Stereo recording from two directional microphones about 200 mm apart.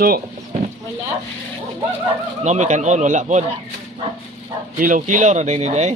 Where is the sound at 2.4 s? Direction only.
35° right (ahead or behind).